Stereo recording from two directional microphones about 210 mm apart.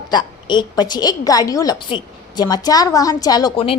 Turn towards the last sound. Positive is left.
turn(degrees=20)  # may be behind; listen again after turning